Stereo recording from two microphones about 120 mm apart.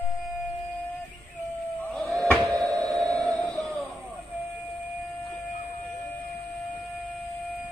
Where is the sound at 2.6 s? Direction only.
Centre (ahead or behind).